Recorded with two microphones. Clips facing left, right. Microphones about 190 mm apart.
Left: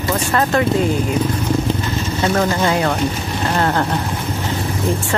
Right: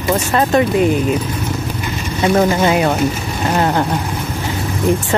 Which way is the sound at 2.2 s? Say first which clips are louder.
Right 4 dB; 15° right (ahead or behind).